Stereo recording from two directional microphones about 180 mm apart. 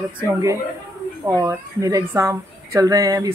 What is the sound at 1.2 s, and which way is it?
A woman's voice, 15° right (ahead or behind).